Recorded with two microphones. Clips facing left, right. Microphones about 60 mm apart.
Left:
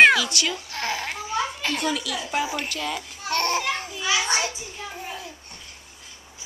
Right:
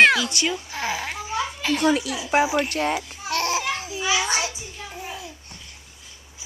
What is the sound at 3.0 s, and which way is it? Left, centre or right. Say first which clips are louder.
Babbling: even; centre.